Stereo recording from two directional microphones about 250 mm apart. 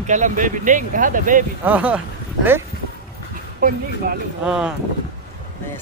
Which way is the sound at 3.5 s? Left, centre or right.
Right.